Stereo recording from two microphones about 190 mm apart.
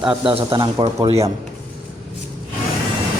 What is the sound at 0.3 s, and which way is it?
Speech, 30° right (ahead or behind).